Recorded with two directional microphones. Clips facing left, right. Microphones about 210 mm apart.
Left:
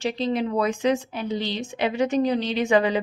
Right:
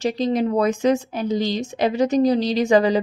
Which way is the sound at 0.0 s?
40° right (ahead or behind).